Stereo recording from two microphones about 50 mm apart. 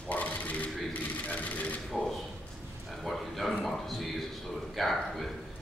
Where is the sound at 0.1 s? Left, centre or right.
Left.